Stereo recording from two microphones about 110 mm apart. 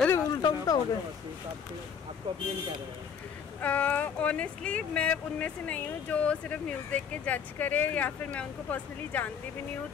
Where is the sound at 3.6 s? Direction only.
15° left (ahead or behind).